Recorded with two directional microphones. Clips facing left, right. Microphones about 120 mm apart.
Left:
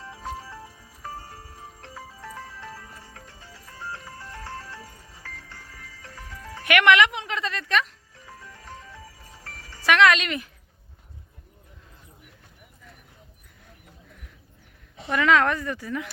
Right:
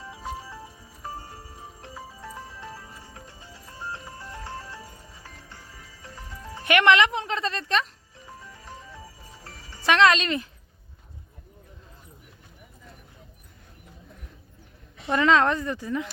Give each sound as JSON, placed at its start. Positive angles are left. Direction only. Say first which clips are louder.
{"t": 0.0, "sound": "music", "louder": "even", "side_deg": -10}
{"t": 1.8, "sound": "music", "louder": "right 1 dB", "side_deg": -10}
{"t": 8.3, "sound": "music", "louder": "even", "side_deg": -15}
{"t": 9.9, "sound": "speech", "louder": "even", "side_deg": -30}
{"t": 15.0, "sound": "speech", "louder": "even", "side_deg": -30}